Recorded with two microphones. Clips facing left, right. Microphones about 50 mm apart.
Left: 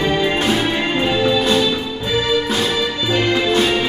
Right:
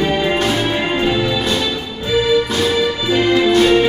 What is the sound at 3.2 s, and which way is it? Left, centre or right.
Music, centre.